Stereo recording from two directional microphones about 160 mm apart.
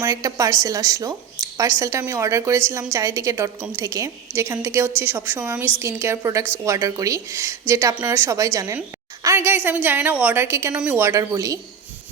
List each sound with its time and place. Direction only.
0.0 s a woman's voice: 20° right (ahead or behind)